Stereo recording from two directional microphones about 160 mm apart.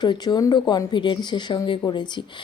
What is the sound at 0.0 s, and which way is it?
A woman's voice, 25° left (ahead or behind).